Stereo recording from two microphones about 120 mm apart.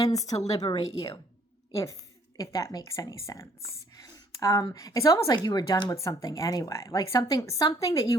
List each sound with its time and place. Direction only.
0.0 s a woman's voice: 30° left (ahead or behind)
1.7 s speech: 25° left (ahead or behind)
3.9 s a sound: 30° left (ahead or behind)
4.7 s a woman's voice: 30° left (ahead or behind)